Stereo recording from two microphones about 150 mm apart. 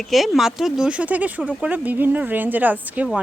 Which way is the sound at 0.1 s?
Centre (ahead or behind).